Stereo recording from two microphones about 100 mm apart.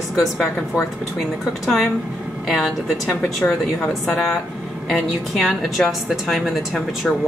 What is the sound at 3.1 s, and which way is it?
Speech, 15° left (ahead or behind).